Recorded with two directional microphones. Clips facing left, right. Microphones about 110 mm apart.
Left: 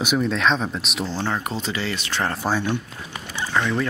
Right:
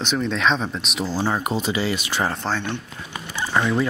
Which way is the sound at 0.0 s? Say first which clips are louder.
Left 1 dB; 5° left (ahead or behind).